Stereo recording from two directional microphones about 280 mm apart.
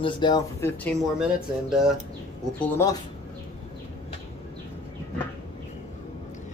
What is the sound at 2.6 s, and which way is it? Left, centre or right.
Speech, centre.